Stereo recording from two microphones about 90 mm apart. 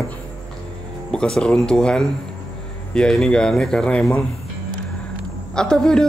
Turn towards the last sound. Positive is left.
turn(degrees=10)  # may be behind; listen again after turning